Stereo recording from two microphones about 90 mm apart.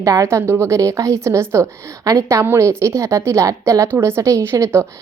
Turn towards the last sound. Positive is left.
turn(degrees=-30)  # may be behind; listen again after turning